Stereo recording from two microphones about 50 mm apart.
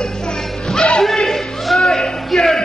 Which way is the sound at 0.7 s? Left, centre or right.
Centre.